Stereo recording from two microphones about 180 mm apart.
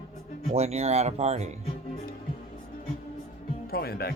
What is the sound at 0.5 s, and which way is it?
Speech, 35° right (ahead or behind).